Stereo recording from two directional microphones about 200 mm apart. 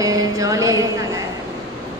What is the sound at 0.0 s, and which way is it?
Music, 15° right (ahead or behind).